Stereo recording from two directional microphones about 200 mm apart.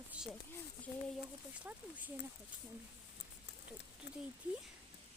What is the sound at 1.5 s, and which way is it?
Speech, 10° right (ahead or behind).